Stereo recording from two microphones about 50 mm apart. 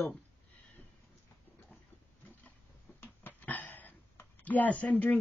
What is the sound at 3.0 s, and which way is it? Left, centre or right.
A woman's voice, left.